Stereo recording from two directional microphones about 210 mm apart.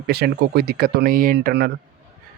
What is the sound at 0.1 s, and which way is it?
Speech, 50° right (ahead or behind).